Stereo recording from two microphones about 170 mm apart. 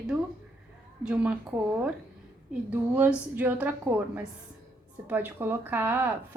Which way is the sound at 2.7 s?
10° right (ahead or behind).